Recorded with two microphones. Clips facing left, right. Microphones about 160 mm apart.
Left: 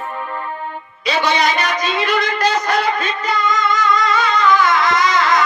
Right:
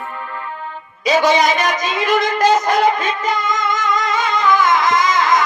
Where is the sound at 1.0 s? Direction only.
45° right (ahead or behind).